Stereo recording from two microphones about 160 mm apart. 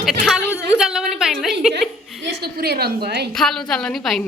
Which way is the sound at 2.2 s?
85° right.